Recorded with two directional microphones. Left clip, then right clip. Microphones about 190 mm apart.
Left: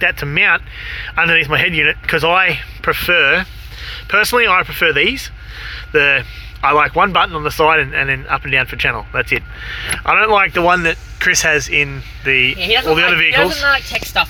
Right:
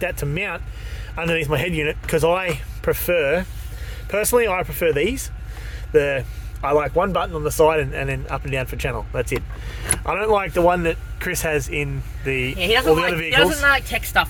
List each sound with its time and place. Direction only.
0.0 s speech: 15° right (ahead or behind)
1.3 s speech: 20° right (ahead or behind)